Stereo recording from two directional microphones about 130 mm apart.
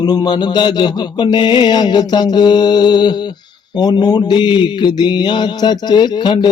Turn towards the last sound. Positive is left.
turn(degrees=35)  # may be behind; listen again after turning